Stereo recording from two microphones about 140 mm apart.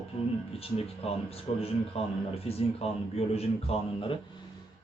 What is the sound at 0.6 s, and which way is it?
Speech, 45° left (ahead or behind).